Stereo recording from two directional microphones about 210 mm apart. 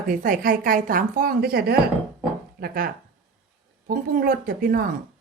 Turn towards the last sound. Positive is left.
turn(degrees=-45)  # may be behind; listen again after turning